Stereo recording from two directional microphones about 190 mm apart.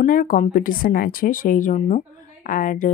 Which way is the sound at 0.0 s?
45° left (ahead or behind).